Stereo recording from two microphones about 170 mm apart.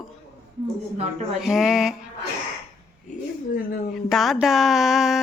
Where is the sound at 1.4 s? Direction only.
Centre (ahead or behind).